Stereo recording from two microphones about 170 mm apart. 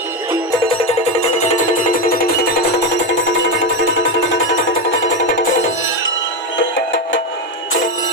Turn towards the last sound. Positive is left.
turn(degrees=90)